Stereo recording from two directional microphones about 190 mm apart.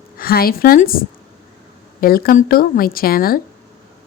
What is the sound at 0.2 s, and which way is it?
A woman's voice, 50° left (ahead or behind).